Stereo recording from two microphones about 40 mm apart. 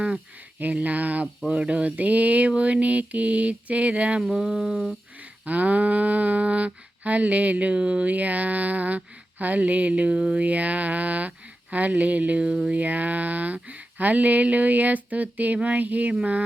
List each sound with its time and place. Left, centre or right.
0.6 s speech: right
4.2 s a sound: centre
5.2 s speech: right
12.7 s speech: right